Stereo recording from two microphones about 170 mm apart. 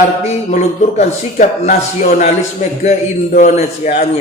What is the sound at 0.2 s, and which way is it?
A man's voice, 45° left (ahead or behind).